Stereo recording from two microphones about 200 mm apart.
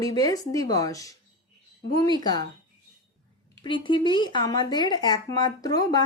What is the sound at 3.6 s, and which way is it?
Speech, 25° left (ahead or behind).